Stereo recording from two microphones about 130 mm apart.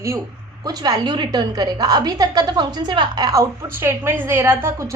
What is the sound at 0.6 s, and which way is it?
A woman's voice, 30° right (ahead or behind).